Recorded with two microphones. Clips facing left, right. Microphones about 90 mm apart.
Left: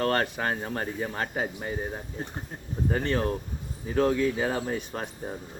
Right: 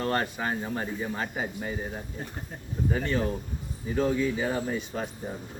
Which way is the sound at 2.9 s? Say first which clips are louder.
Left 2 dB; 55° left (ahead or behind).